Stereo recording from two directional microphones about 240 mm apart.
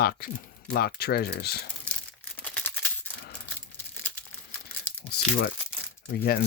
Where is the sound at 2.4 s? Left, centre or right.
Centre.